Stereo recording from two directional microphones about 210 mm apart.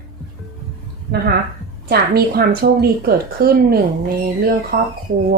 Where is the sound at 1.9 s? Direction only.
45° right (ahead or behind).